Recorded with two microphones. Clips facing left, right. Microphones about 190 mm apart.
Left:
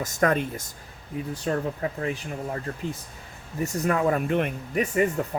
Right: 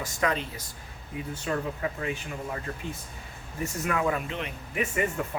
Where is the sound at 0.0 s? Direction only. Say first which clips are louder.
Left 5 dB; 50° left (ahead or behind).